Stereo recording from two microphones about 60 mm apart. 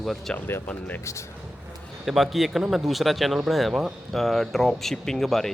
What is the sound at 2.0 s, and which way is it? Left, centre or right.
Speech, centre.